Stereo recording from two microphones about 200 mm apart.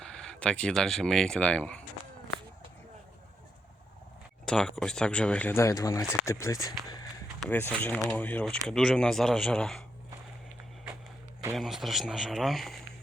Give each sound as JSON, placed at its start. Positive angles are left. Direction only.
{"t": 0.0, "sound": "speech", "side_deg": 5}
{"t": 4.4, "sound": "speech", "side_deg": 5}
{"t": 7.3, "sound": "speech", "side_deg": 5}
{"t": 11.5, "sound": "speech", "side_deg": 0}